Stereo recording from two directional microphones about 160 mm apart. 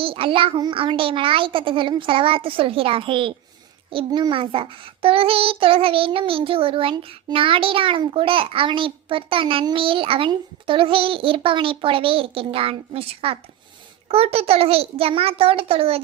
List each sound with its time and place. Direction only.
0.0 s child singing: 35° right (ahead or behind)